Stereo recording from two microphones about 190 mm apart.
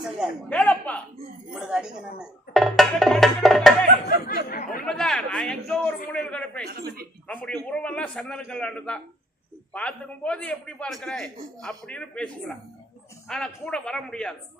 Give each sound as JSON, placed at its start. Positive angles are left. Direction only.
{"t": 0.4, "sound": "a man's voice", "side_deg": 5}
{"t": 1.5, "sound": "a man's voice", "side_deg": -5}
{"t": 4.0, "sound": "speech", "side_deg": 45}
{"t": 4.9, "sound": "a man's voice", "side_deg": 5}
{"t": 6.7, "sound": "speech", "side_deg": -55}
{"t": 7.3, "sound": "a man's voice", "side_deg": 5}